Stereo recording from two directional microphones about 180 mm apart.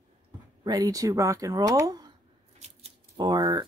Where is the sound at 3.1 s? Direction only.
20° right (ahead or behind).